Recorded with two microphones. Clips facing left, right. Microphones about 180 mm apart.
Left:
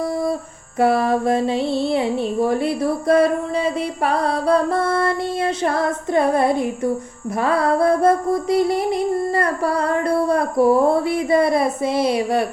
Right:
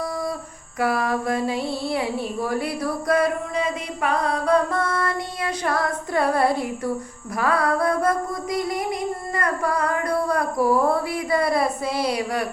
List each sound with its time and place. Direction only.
0.8 s music: 25° left (ahead or behind)